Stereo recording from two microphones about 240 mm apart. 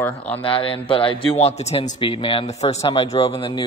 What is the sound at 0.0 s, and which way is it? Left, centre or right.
Speech, centre.